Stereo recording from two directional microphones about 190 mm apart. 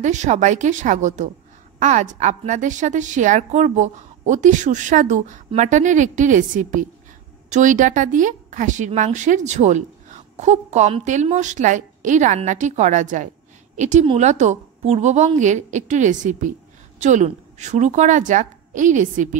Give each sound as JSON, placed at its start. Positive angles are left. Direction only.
{"t": 0.0, "sound": "a woman's voice", "side_deg": -40}